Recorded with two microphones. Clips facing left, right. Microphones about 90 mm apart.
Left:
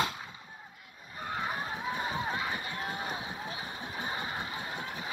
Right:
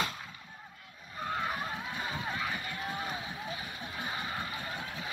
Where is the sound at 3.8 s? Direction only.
20° left (ahead or behind).